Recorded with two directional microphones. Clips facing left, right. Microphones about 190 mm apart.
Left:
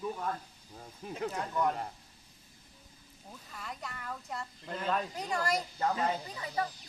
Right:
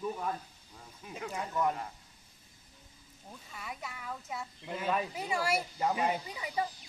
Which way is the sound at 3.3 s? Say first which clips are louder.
Even; centre (ahead or behind).